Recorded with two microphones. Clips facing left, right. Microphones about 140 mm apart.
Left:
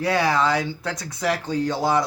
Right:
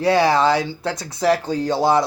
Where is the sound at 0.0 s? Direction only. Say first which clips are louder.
Right 5 dB; 30° right (ahead or behind).